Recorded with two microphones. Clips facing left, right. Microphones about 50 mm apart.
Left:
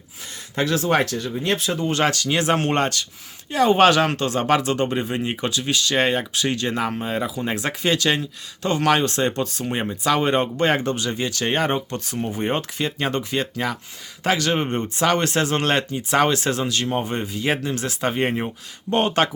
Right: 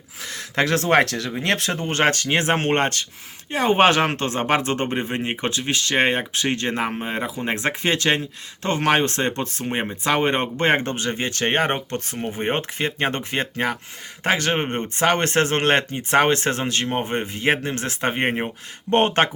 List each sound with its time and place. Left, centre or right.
0.2 s speech: right
1.8 s speech: right